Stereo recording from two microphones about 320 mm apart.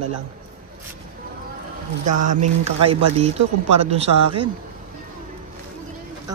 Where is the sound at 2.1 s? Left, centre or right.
Right.